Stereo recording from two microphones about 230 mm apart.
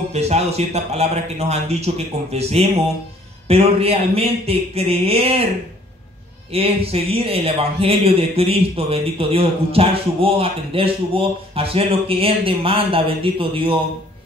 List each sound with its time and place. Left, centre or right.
0.1 s a man's voice: right
6.5 s a man's voice: right